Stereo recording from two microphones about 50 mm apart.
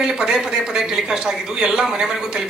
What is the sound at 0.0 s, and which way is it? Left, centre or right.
A woman's voice, centre.